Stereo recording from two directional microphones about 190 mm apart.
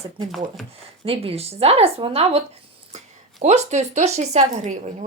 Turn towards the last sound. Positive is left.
turn(degrees=-35)  # may be behind; listen again after turning